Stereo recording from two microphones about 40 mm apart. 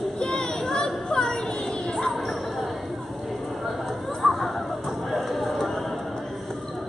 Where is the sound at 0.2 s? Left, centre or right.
Centre.